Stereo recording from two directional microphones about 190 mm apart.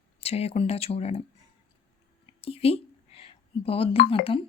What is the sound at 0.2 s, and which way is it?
A woman's voice, 30° left (ahead or behind).